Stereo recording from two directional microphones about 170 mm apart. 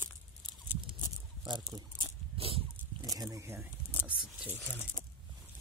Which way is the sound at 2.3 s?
35° right (ahead or behind).